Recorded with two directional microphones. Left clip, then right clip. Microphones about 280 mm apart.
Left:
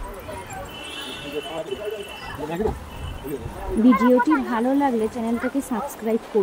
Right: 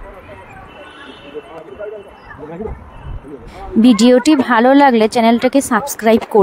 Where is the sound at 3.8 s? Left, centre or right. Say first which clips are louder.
Right 7 dB; right.